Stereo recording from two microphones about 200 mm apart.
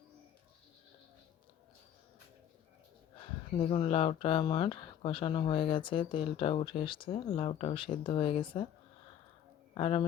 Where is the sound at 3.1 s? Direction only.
25° left (ahead or behind).